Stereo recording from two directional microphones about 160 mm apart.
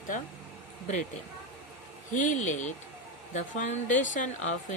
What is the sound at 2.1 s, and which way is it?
Speech, 50° left (ahead or behind).